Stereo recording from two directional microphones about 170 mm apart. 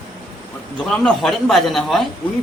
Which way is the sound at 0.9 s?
5° left (ahead or behind).